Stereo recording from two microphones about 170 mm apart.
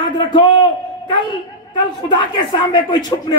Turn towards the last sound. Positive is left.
turn(degrees=25)  # may be behind; listen again after turning